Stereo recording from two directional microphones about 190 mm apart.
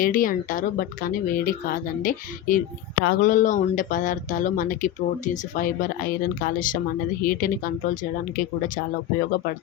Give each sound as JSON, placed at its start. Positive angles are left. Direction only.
{"t": 0.0, "sound": "speech", "side_deg": 45}